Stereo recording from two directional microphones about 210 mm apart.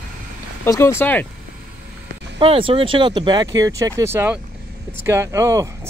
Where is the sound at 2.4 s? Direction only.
25° right (ahead or behind).